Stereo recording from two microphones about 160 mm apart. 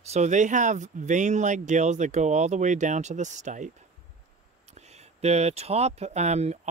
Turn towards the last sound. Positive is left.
turn(degrees=-45)  # may be behind; listen again after turning